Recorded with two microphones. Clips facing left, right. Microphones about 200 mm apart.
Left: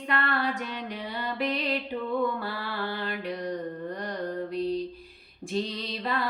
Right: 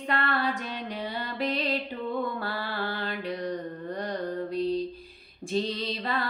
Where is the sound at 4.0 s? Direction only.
30° right (ahead or behind).